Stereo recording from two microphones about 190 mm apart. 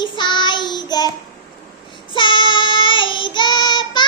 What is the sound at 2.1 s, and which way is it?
Child singing, 25° left (ahead or behind).